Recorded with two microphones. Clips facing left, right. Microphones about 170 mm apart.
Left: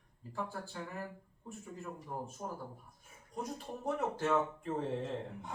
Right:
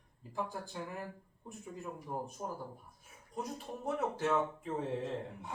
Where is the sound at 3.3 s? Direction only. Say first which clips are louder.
Even; centre (ahead or behind).